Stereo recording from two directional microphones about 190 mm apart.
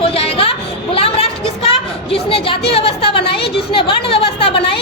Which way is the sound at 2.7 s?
30° left (ahead or behind).